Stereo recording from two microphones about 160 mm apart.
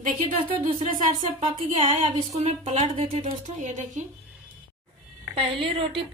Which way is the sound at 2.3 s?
45° right (ahead or behind).